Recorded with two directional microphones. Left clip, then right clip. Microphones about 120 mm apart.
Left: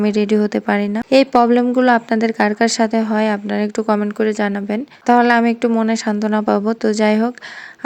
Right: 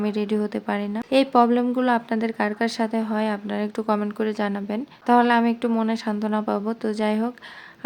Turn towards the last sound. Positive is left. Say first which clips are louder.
# left 9 dB
turn(degrees=55)  # may be behind; listen again after turning